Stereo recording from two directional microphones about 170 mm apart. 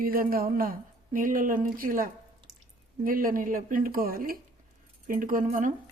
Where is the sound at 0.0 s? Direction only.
60° right (ahead or behind).